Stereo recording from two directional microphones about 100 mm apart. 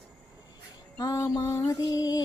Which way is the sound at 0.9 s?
35° left (ahead or behind).